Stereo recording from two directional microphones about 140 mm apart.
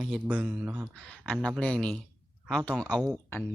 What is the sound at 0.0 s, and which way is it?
Speech, 5° right (ahead or behind).